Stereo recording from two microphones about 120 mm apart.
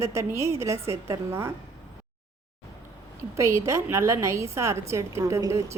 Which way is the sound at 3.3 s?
25° right (ahead or behind).